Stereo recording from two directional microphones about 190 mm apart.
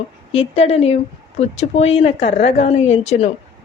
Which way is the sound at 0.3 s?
35° left (ahead or behind).